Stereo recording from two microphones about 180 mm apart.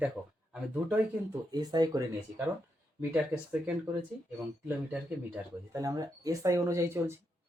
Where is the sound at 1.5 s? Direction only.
25° right (ahead or behind).